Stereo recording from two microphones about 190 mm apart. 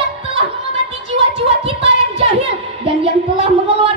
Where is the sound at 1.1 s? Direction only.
30° right (ahead or behind).